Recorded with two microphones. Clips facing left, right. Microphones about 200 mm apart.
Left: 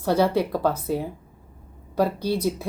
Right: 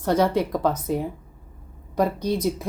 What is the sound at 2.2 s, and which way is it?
Speech, 5° left (ahead or behind).